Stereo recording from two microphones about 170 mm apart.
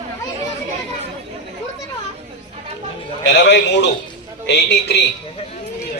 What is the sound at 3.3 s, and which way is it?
A man's voice, 90° left.